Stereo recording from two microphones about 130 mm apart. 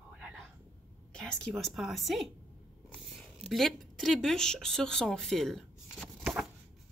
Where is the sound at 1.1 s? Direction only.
5° left (ahead or behind).